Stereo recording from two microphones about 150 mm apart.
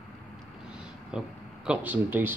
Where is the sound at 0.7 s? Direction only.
5° right (ahead or behind).